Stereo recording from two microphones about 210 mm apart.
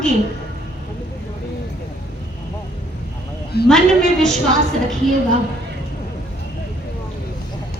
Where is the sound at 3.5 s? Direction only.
50° left (ahead or behind).